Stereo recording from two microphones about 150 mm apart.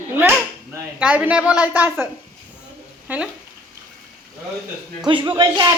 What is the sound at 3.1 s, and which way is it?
Speech, 10° right (ahead or behind).